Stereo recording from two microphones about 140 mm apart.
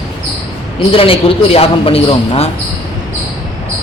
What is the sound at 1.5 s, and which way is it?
Speech, 45° left (ahead or behind).